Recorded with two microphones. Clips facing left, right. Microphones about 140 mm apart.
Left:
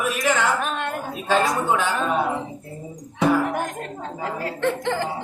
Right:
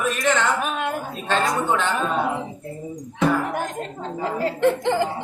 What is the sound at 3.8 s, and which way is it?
Speech, 30° right (ahead or behind).